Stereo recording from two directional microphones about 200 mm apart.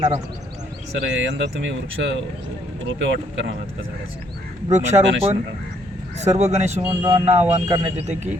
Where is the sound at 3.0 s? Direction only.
65° right (ahead or behind).